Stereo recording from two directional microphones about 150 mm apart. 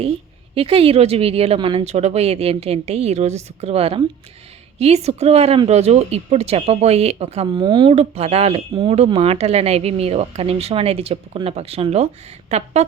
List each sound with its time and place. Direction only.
0.0 s a woman's voice: 40° right (ahead or behind)
7.6 s speech: 30° right (ahead or behind)
7.9 s a woman's voice: 45° right (ahead or behind)